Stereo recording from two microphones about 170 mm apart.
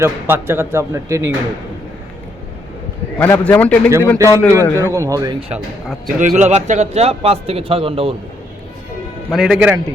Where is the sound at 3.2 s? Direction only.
10° left (ahead or behind).